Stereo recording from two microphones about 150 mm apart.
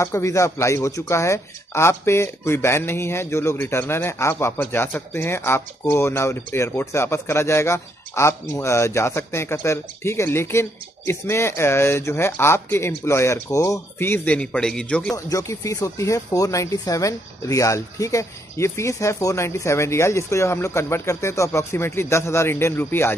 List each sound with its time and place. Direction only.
0.0 s speech: 20° left (ahead or behind)
15.1 s speech: 20° left (ahead or behind)